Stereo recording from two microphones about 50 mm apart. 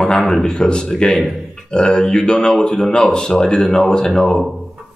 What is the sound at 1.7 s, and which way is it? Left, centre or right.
A man's voice, centre.